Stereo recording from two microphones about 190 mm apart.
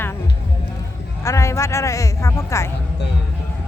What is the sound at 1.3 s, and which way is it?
Speech, 15° left (ahead or behind).